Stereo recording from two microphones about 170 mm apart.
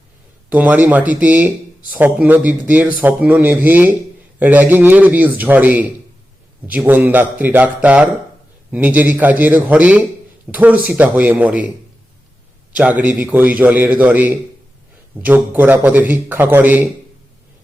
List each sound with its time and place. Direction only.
0.5 s speech: 10° right (ahead or behind)
12.7 s speech: 10° right (ahead or behind)